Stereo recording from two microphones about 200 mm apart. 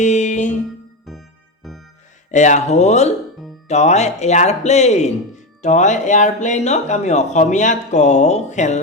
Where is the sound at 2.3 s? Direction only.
35° left (ahead or behind).